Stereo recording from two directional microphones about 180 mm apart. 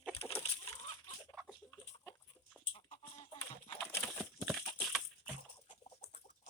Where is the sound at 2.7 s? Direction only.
35° left (ahead or behind).